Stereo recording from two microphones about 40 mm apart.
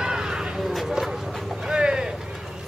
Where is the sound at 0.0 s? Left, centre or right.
Centre.